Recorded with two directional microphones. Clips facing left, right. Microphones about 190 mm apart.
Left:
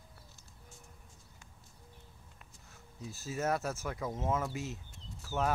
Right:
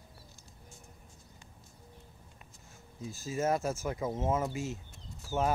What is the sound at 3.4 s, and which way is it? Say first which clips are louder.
Speech: right 3 dB; 15° right (ahead or behind).